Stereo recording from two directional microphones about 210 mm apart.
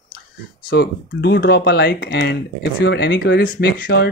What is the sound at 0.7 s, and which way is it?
Speech, 50° left (ahead or behind).